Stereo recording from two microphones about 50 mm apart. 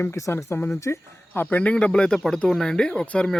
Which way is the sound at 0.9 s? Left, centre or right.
Left.